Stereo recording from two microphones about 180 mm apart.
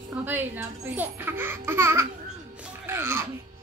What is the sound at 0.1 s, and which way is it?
Speech, 10° right (ahead or behind).